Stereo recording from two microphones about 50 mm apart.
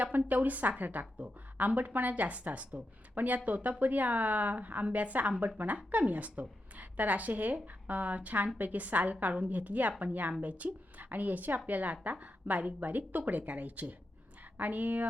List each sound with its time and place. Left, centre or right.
0.3 s a woman's voice: right